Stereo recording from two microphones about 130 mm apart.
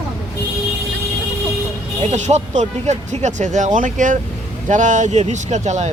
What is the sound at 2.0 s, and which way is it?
Speech, 60° right (ahead or behind).